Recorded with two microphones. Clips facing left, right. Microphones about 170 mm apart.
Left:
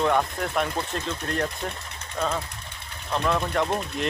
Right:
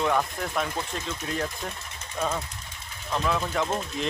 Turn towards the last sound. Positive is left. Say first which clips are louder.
# left 2 dB
turn(degrees=0)  # may be behind; listen again after turning